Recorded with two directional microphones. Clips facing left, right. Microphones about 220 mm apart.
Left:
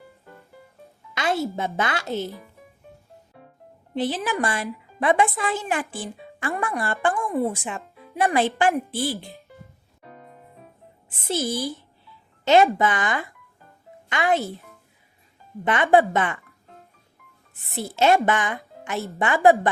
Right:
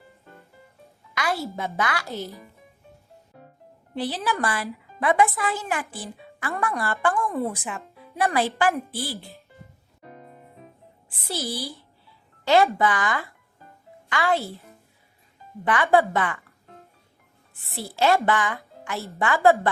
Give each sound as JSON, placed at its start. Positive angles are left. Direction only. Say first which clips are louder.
{"t": 1.1, "sound": "music", "louder": "left 3 dB", "side_deg": 25}
{"t": 1.5, "sound": "a woman's voice", "louder": "left 2 dB", "side_deg": 25}
{"t": 3.9, "sound": "a woman's voice", "louder": "left 2 dB", "side_deg": 20}
{"t": 11.3, "sound": "a woman's voice", "louder": "left 5 dB", "side_deg": 20}
{"t": 15.6, "sound": "a woman's voice", "louder": "left 2 dB", "side_deg": 20}
{"t": 17.7, "sound": "a woman's voice", "louder": "left 2 dB", "side_deg": 20}